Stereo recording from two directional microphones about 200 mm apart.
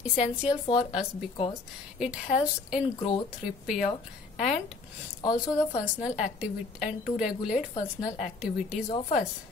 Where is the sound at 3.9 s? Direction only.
35° left (ahead or behind).